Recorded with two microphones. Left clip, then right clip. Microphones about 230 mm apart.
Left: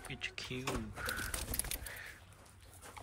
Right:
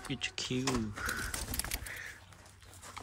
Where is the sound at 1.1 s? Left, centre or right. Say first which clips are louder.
Right 3 dB; centre.